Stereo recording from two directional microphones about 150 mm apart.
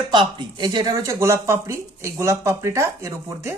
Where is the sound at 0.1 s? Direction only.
30° right (ahead or behind).